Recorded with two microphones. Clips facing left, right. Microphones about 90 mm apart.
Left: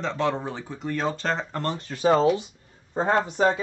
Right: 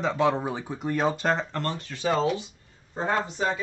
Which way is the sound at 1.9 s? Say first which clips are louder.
Left 6 dB; 35° left (ahead or behind).